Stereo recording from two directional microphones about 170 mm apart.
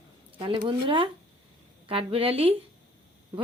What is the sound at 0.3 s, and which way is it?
Speech, 30° right (ahead or behind).